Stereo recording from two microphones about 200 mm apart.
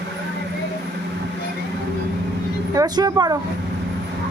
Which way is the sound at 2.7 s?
20° right (ahead or behind).